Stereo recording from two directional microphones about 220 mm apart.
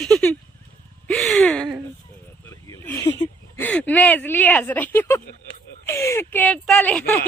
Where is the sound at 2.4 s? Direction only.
15° left (ahead or behind).